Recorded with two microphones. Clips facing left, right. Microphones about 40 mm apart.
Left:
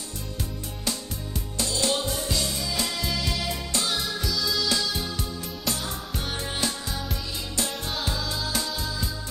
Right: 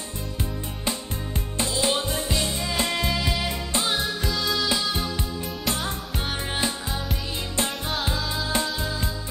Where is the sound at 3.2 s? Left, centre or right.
Right.